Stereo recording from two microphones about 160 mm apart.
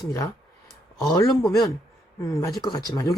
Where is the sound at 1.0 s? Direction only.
25° left (ahead or behind).